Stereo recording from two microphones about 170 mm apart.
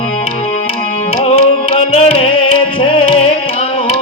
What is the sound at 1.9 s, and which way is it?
Music, 40° left (ahead or behind).